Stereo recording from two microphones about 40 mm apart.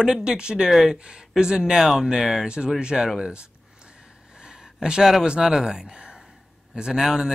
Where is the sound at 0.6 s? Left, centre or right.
Centre.